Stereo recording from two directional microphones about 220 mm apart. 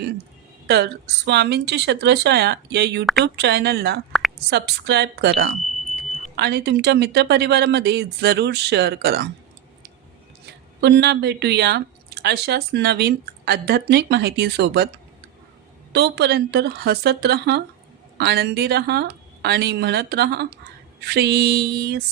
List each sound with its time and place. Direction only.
0.7 s speech: 50° right (ahead or behind)
10.4 s speech: 50° right (ahead or behind)
15.9 s speech: 50° right (ahead or behind)